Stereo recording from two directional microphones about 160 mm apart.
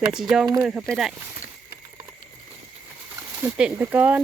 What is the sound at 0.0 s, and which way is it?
Speech, 5° right (ahead or behind).